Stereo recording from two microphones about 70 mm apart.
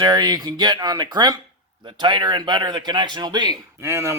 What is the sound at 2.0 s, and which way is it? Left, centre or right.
Speech, right.